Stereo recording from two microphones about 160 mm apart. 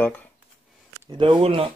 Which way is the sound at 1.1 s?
30° right (ahead or behind).